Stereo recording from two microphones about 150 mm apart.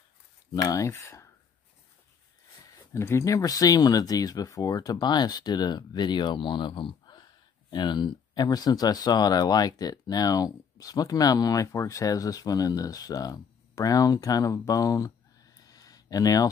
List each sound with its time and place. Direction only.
0.6 s speech: 25° left (ahead or behind)
2.9 s speech: 20° left (ahead or behind)